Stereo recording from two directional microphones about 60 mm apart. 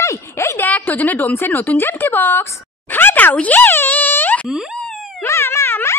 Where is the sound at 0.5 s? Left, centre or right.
Left.